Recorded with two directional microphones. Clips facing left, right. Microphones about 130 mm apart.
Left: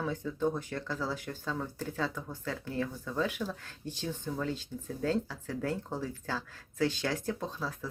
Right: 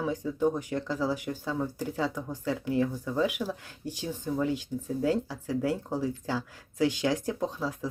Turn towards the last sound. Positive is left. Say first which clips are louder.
# right 6 dB
turn(degrees=-15)  # may be behind; listen again after turning